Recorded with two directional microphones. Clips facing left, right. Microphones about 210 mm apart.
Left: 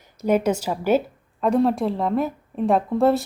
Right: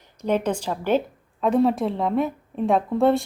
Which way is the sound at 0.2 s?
10° left (ahead or behind).